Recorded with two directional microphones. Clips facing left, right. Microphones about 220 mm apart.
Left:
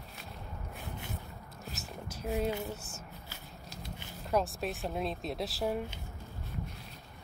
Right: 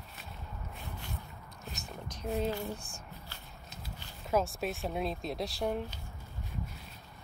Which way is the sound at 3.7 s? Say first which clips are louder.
Left 3 dB; centre (ahead or behind).